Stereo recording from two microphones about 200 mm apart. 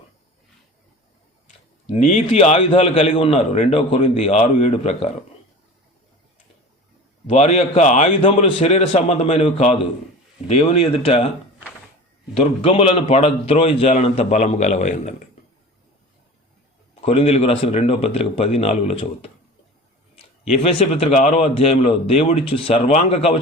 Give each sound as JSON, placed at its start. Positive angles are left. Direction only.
{"t": 1.9, "sound": "a man's voice", "side_deg": 30}
{"t": 7.3, "sound": "a man's voice", "side_deg": 30}
{"t": 12.3, "sound": "a man's voice", "side_deg": 25}
{"t": 16.9, "sound": "a man's voice", "side_deg": 30}
{"t": 20.6, "sound": "a man's voice", "side_deg": 30}